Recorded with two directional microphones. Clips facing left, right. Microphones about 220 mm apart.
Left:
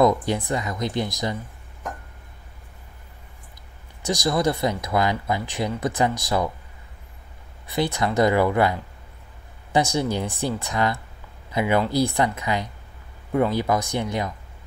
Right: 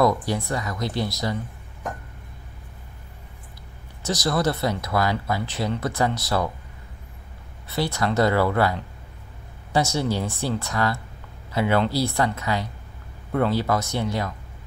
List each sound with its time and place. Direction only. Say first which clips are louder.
0.0 s speech: left 2 dB; 20° left (ahead or behind)
4.0 s speech: left 1 dB; 15° left (ahead or behind)
7.6 s speech: left 1 dB; 15° left (ahead or behind)